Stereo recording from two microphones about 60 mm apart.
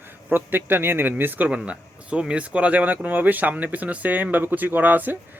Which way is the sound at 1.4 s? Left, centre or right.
Right.